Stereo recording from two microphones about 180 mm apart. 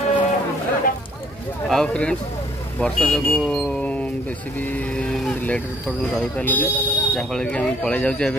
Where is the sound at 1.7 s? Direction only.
5° left (ahead or behind).